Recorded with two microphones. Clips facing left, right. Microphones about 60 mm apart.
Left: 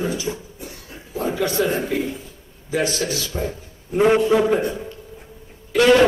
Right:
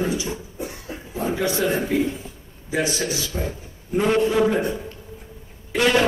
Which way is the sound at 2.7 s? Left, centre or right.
Right.